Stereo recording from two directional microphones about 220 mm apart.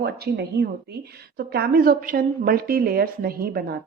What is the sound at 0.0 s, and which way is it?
Speech, 45° right (ahead or behind).